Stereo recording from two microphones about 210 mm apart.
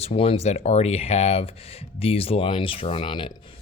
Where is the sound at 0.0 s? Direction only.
30° left (ahead or behind).